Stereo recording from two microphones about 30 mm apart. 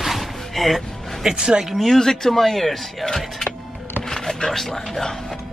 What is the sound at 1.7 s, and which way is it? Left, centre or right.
Speech, centre.